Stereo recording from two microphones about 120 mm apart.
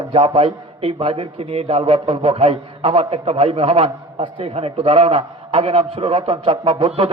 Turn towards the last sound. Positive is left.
turn(degrees=-50)  # may be behind; listen again after turning